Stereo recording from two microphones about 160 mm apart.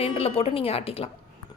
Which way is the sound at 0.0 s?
40° left (ahead or behind).